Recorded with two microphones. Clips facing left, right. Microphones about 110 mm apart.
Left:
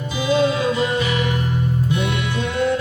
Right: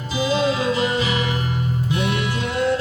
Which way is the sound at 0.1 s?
15° right (ahead or behind).